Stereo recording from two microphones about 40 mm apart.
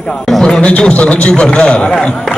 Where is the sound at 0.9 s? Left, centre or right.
Left.